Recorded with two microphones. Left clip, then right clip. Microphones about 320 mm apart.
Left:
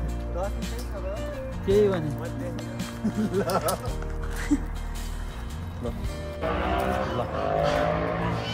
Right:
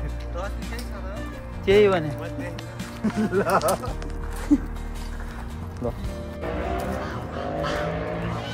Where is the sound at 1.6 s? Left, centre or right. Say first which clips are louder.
Right 5 dB; centre.